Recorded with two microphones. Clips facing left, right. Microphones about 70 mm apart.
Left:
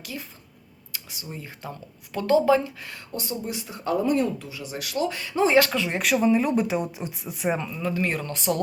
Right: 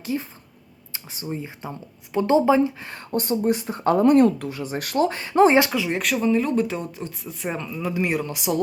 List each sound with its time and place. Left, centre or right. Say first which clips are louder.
0.0 s speech: right 9 dB; right
5.7 s speech: even; centre
6.2 s speech: right 2 dB; centre
7.8 s speech: right 2 dB; centre